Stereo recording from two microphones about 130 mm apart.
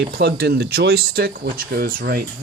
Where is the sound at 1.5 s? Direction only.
90° right.